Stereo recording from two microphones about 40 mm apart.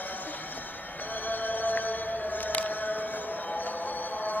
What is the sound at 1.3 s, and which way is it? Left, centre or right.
Music, left.